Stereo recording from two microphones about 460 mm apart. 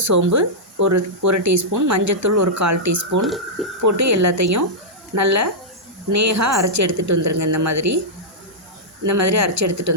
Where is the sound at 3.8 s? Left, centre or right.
Right.